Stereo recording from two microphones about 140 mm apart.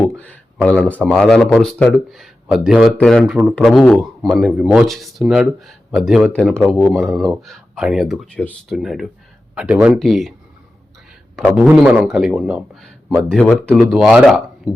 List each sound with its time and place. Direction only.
0.2 s speech: 10° left (ahead or behind)
11.5 s speech: 10° right (ahead or behind)